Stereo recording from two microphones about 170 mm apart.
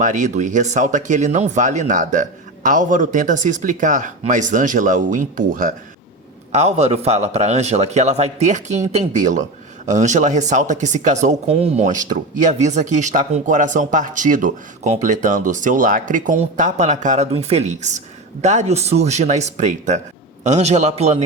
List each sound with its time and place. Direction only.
0.0 s speech: 45° right (ahead or behind)
6.5 s speech: 40° right (ahead or behind)